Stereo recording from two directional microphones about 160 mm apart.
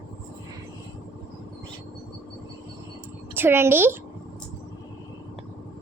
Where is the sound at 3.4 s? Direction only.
15° right (ahead or behind).